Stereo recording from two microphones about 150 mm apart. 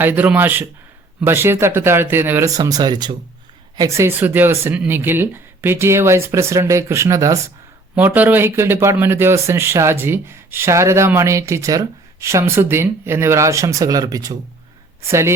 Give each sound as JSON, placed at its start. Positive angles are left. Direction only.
{"t": 0.0, "sound": "speech", "side_deg": -10}